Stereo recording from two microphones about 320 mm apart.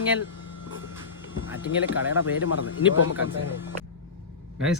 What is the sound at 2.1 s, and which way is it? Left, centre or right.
Speech, left.